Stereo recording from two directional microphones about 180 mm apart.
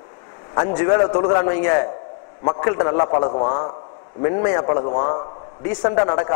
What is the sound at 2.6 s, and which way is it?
A man's voice, 25° left (ahead or behind).